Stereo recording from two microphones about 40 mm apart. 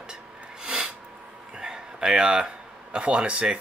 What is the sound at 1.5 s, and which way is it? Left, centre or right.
Speech, centre.